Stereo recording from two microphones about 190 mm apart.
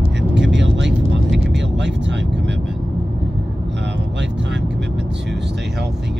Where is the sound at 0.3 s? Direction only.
70° right (ahead or behind).